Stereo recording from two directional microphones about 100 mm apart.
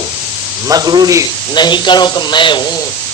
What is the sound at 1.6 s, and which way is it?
Speech, 50° left (ahead or behind).